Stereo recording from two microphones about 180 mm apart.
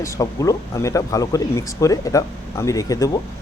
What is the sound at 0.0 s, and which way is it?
Speech, 20° left (ahead or behind).